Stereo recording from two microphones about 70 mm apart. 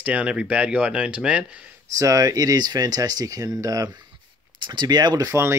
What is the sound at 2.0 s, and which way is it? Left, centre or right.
Speech, right.